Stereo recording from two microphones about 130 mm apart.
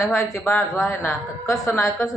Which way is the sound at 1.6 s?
25° left (ahead or behind).